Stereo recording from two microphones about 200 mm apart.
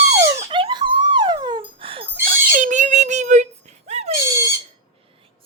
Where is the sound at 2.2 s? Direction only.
40° right (ahead or behind).